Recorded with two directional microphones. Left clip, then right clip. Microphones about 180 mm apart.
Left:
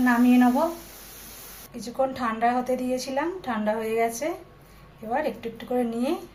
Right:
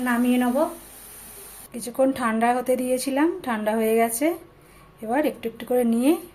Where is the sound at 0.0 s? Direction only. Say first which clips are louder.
Left 2 dB; 55° right (ahead or behind).